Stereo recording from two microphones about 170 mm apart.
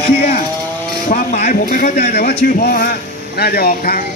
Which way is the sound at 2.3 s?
60° left (ahead or behind).